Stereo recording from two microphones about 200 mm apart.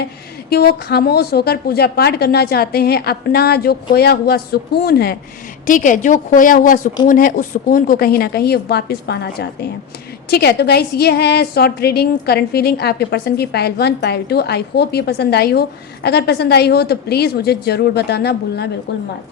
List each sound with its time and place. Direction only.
0.5 s a woman's voice: 50° left (ahead or behind)
5.6 s a woman's voice: 40° left (ahead or behind)